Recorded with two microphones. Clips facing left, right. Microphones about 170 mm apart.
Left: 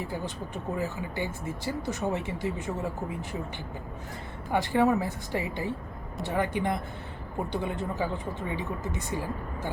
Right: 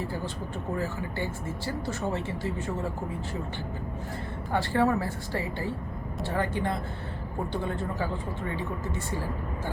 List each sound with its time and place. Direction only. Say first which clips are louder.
0.0 s speech: right 1 dB; 15° left (ahead or behind)
4.5 s speech: left 1 dB; 15° left (ahead or behind)